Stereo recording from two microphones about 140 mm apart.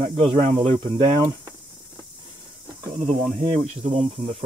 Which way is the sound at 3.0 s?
55° right (ahead or behind).